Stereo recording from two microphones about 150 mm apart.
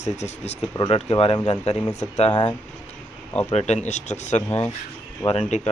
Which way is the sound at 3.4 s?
45° left (ahead or behind).